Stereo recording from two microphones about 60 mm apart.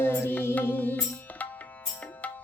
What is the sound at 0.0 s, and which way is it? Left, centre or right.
Music, left.